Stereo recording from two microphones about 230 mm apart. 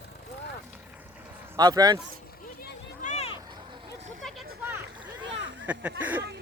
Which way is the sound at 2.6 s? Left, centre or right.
Left.